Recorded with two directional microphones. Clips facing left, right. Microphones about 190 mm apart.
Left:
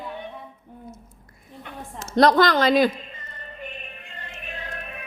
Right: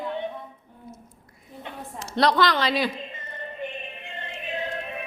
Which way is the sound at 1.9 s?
45° left (ahead or behind).